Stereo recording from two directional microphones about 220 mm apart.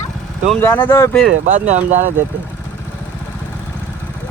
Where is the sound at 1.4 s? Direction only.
35° right (ahead or behind).